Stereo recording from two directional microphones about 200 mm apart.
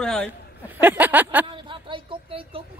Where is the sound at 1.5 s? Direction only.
25° right (ahead or behind).